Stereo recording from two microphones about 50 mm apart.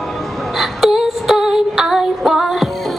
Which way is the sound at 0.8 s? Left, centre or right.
Centre.